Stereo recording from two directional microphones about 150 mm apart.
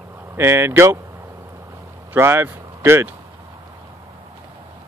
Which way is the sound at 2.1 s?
15° right (ahead or behind).